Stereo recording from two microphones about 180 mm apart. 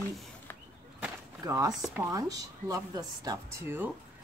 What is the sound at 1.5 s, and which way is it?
Speech, 20° right (ahead or behind).